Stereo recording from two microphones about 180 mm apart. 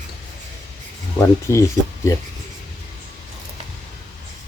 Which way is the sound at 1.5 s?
15° left (ahead or behind).